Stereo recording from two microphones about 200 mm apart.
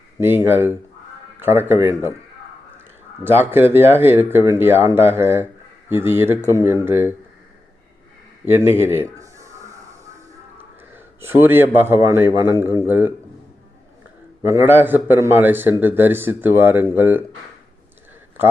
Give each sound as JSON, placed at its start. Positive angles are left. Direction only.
{"t": 0.2, "sound": "speech", "side_deg": -10}
{"t": 3.2, "sound": "speech", "side_deg": -10}
{"t": 8.4, "sound": "speech", "side_deg": -10}
{"t": 9.1, "sound": "a sound", "side_deg": -15}
{"t": 10.6, "sound": "a man's voice", "side_deg": -10}
{"t": 14.4, "sound": "speech", "side_deg": -10}